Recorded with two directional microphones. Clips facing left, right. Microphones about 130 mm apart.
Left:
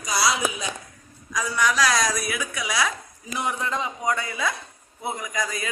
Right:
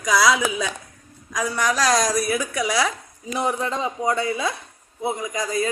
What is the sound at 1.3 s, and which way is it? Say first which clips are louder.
A woman's voice: right 1 dB; 50° right (ahead or behind).